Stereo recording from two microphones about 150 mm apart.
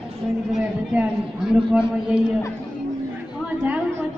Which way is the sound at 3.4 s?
10° right (ahead or behind).